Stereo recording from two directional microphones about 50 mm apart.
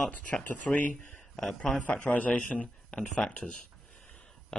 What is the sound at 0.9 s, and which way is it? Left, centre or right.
A man's voice, left.